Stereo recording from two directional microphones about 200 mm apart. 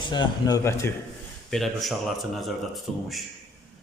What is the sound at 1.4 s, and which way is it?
A man's voice, centre (ahead or behind).